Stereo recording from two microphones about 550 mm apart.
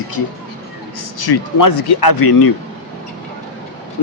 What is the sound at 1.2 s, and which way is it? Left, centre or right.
Speech, left.